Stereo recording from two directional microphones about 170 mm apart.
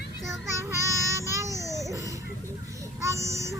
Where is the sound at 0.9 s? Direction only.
20° right (ahead or behind).